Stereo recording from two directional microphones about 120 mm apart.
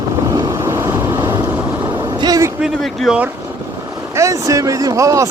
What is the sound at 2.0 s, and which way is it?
Vehicle, 35° right (ahead or behind).